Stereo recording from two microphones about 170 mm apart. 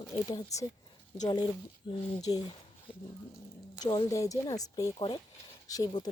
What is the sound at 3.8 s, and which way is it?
Speech, 20° left (ahead or behind).